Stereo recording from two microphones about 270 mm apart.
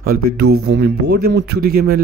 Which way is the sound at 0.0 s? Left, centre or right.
Right.